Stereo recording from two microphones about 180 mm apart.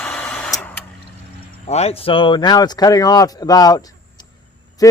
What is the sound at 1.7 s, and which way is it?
Speech, 35° left (ahead or behind).